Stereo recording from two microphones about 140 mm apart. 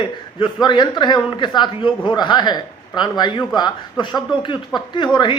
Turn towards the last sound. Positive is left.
turn(degrees=35)  # may be behind; listen again after turning